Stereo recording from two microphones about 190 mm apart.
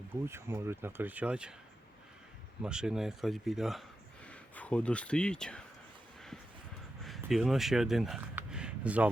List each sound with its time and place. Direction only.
0.1 s speech: 15° right (ahead or behind)
2.6 s speech: 5° right (ahead or behind)
7.0 s a sound: centre (ahead or behind)